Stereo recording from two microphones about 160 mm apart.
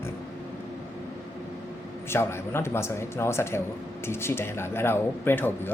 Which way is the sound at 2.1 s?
15° left (ahead or behind).